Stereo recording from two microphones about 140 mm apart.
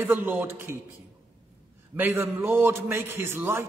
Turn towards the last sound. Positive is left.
turn(degrees=-15)  # may be behind; listen again after turning